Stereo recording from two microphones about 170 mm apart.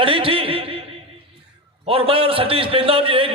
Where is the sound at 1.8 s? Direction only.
35° right (ahead or behind).